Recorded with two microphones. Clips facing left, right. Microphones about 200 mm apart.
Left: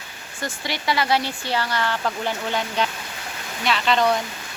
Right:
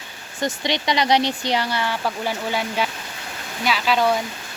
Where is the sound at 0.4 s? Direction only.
20° right (ahead or behind).